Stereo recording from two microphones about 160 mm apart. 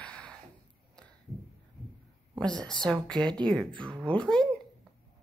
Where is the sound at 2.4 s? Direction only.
5° left (ahead or behind).